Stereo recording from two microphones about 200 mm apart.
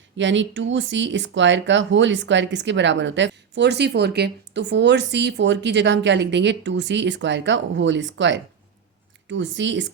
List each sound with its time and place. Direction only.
0.2 s speech: 65° right (ahead or behind)